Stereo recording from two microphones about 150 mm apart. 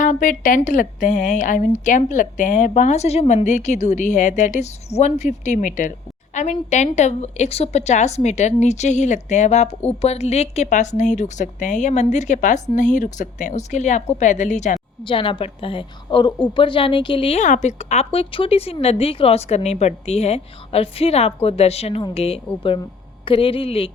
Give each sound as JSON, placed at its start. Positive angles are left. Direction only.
{"t": 0.0, "sound": "a woman's voice", "side_deg": 60}
{"t": 15.0, "sound": "a woman's voice", "side_deg": 35}
{"t": 17.4, "sound": "a woman's voice", "side_deg": 55}